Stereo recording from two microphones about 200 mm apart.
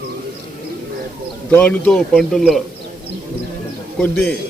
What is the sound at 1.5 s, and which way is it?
A man's voice, 10° left (ahead or behind).